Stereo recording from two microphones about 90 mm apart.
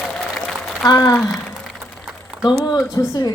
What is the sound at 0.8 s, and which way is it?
Speech, 45° left (ahead or behind).